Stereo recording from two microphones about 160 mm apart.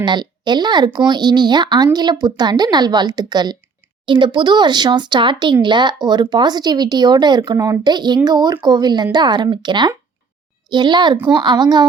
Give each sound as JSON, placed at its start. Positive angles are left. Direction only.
{"t": 0.0, "sound": "speech", "side_deg": -30}